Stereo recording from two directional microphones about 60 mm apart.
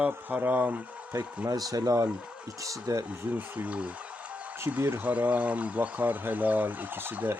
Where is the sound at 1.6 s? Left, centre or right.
Right.